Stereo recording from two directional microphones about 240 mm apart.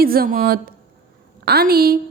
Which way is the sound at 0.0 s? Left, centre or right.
Right.